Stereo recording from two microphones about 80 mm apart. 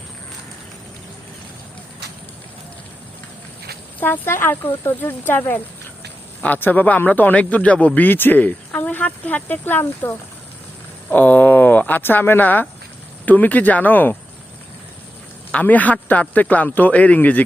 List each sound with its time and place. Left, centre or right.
4.0 s a man's voice: left
15.5 s a man's voice: centre